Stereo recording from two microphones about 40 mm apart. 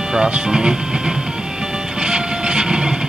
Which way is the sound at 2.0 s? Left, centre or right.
Right.